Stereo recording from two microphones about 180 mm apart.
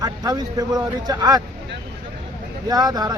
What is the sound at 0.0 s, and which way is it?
Speech, 20° right (ahead or behind).